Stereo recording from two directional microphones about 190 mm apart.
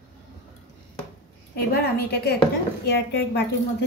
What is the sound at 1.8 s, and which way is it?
A woman's voice, 60° left (ahead or behind).